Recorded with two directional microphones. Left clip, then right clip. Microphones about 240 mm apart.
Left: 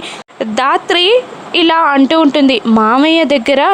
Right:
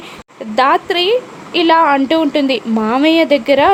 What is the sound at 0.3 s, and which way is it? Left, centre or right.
A woman's voice, centre.